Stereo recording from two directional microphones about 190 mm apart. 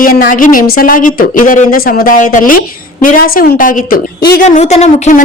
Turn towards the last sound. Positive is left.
turn(degrees=35)  # may be behind; listen again after turning